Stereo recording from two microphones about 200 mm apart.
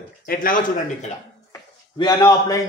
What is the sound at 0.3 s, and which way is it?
Speech, 45° left (ahead or behind).